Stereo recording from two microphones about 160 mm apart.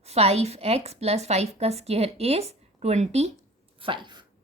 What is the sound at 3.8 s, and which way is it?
Dog, 30° right (ahead or behind).